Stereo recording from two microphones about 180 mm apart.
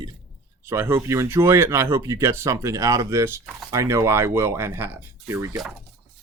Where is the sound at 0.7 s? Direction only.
15° right (ahead or behind).